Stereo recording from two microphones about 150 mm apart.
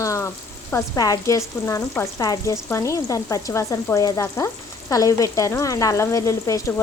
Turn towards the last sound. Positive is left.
turn(degrees=20)  # may be behind; listen again after turning